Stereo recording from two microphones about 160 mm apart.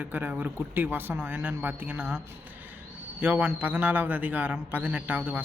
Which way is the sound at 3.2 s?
10° right (ahead or behind).